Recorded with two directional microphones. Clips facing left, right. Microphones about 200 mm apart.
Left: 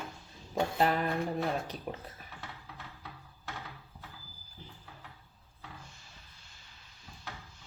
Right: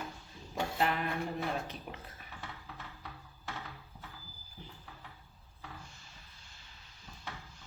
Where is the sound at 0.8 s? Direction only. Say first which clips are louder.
Left 3 dB; 40° left (ahead or behind).